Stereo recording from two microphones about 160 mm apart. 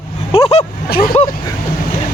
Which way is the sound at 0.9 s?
70° left (ahead or behind).